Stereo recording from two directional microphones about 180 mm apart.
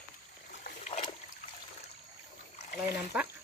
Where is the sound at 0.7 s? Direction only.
40° left (ahead or behind).